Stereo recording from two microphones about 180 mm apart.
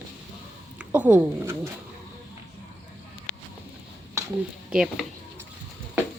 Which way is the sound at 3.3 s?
85° left.